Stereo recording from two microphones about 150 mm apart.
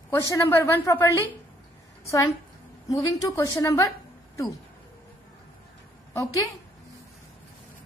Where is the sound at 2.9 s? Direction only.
20° left (ahead or behind).